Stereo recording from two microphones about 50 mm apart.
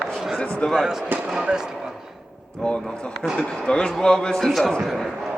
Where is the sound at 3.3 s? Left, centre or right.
Centre.